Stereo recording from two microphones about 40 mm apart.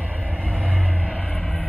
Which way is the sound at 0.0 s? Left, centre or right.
Right.